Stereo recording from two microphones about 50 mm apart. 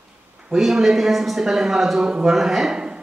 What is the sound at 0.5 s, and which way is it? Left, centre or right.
Speech, centre.